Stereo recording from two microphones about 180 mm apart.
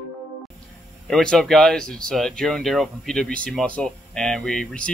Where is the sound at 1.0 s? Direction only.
5° left (ahead or behind).